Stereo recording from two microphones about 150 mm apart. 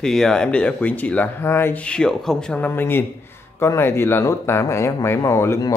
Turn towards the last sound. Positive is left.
turn(degrees=20)  # may be behind; listen again after turning